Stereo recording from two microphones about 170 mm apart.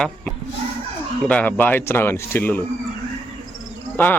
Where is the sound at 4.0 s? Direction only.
10° left (ahead or behind).